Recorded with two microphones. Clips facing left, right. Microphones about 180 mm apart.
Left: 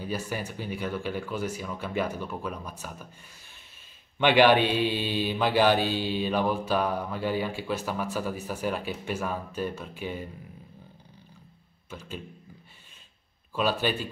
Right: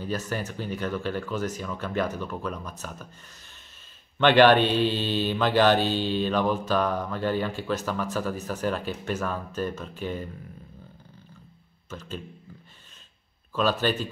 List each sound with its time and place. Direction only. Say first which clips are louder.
0.0 s mantra: right 2 dB; 10° left (ahead or behind)
4.2 s mantra: right 2 dB; 10° left (ahead or behind)
11.9 s mantra: right 3 dB; 10° left (ahead or behind)
13.6 s mantra: right 2 dB; 10° left (ahead or behind)